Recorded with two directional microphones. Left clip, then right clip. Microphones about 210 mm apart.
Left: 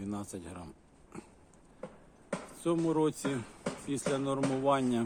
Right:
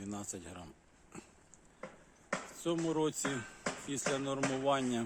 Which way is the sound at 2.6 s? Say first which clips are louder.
Left 5 dB; centre (ahead or behind).